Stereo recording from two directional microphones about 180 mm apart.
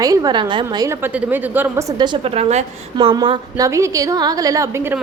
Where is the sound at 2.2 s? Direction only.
35° right (ahead or behind).